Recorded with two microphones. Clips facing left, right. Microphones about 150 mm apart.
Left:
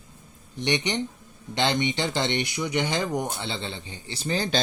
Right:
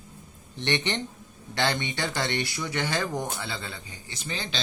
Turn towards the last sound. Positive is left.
turn(degrees=40)  # may be behind; listen again after turning